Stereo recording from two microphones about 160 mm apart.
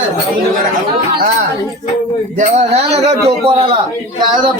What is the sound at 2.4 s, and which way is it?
A man's voice, 45° right (ahead or behind).